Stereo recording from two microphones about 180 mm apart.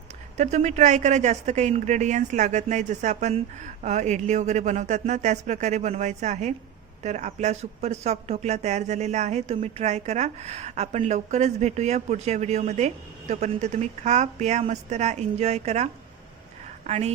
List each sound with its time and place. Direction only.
0.3 s speech: 40° right (ahead or behind)